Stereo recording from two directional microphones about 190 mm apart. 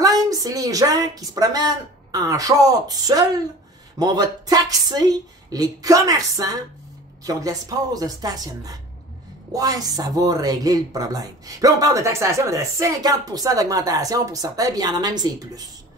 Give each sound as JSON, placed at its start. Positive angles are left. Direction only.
{"t": 0.3, "sound": "a woman's voice", "side_deg": -20}